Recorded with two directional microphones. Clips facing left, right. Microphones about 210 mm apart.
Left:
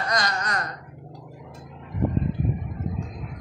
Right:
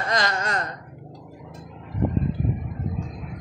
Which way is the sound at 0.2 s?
25° right (ahead or behind).